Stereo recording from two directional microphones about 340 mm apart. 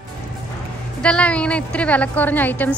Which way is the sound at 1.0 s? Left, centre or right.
Centre.